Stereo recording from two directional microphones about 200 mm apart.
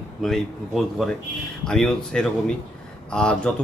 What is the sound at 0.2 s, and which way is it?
A man's voice, centre (ahead or behind).